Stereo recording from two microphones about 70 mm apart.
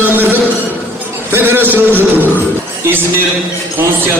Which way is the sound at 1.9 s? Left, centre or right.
Left.